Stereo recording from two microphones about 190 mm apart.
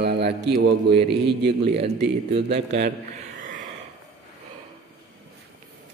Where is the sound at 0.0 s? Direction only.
60° right (ahead or behind).